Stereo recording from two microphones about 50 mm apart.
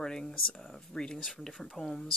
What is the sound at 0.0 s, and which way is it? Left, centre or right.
Speech, centre.